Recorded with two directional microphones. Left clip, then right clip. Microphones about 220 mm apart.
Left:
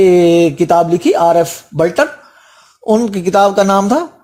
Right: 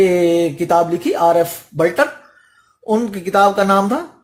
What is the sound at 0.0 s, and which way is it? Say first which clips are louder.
Speech: left 5 dB; 35° left (ahead or behind).